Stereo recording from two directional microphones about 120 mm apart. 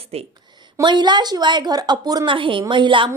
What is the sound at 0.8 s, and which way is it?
A woman's voice, 40° right (ahead or behind).